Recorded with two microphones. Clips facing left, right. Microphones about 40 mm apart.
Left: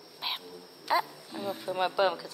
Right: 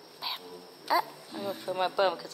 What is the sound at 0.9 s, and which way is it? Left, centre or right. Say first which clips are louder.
Speech: even; left.